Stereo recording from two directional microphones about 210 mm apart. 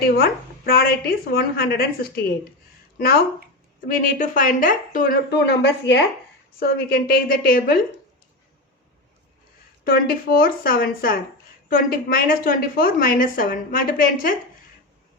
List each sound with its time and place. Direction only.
0.0 s a woman's voice: 45° left (ahead or behind)
6.6 s a woman's voice: 45° left (ahead or behind)
9.8 s a woman's voice: 45° left (ahead or behind)